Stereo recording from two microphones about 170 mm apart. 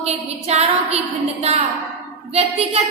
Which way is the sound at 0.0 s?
40° right (ahead or behind).